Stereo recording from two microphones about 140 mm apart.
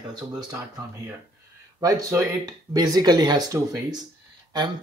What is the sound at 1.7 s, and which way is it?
Speech, 25° right (ahead or behind).